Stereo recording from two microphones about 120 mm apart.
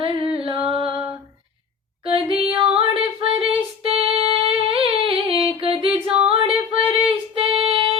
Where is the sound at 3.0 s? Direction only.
50° right (ahead or behind).